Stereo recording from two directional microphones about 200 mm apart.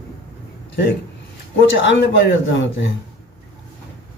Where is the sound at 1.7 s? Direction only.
65° left (ahead or behind).